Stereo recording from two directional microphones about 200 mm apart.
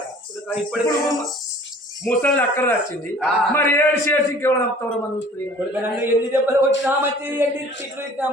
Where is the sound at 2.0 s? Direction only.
5° left (ahead or behind).